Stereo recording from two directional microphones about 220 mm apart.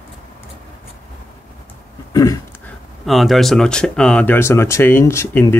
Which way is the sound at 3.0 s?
Centre (ahead or behind).